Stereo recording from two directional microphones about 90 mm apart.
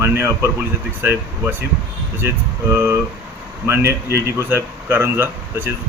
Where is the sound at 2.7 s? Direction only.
30° right (ahead or behind).